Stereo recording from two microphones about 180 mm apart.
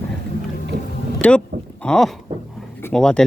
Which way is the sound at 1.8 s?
5° left (ahead or behind).